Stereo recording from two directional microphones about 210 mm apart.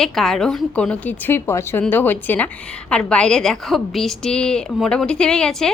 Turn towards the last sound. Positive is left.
turn(degrees=5)  # may be behind; listen again after turning